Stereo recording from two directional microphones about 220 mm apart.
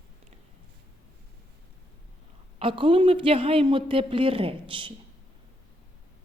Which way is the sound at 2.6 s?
25° right (ahead or behind).